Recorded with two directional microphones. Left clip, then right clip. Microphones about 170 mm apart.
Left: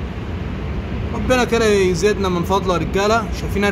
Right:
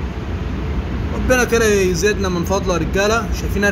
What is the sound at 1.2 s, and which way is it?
Speech, 5° left (ahead or behind).